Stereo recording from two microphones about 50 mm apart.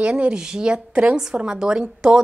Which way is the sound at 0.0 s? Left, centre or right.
Right.